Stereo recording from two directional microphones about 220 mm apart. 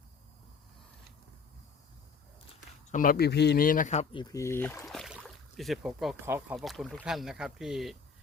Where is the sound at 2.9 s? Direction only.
40° left (ahead or behind).